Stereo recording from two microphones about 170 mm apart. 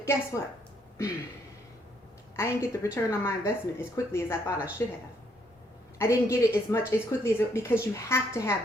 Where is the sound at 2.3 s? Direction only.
15° left (ahead or behind).